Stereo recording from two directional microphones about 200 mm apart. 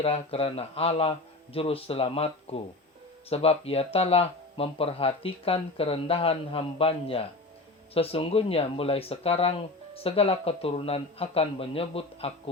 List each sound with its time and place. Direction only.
0.0 s speech: 30° left (ahead or behind)